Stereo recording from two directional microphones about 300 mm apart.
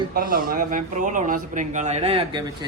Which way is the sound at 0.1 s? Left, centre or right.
Right.